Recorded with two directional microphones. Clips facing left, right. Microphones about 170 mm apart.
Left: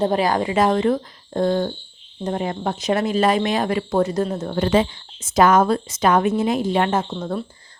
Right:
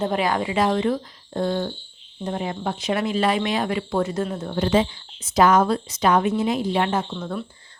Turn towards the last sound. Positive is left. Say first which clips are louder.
# left 3 dB
turn(degrees=35)  # may be behind; listen again after turning